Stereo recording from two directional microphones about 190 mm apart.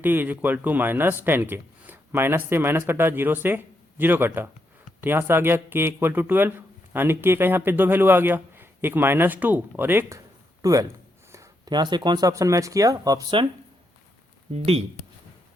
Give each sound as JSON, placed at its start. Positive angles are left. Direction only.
{"t": 0.0, "sound": "a man's voice", "side_deg": -10}
{"t": 14.5, "sound": "speech", "side_deg": -30}